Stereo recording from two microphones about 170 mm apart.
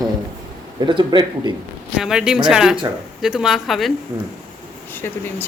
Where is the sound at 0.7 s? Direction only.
25° right (ahead or behind).